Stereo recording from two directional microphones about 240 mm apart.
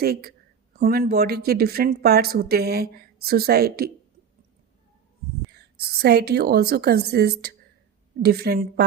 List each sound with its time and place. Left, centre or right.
0.0 s speech: right
5.5 s speech: right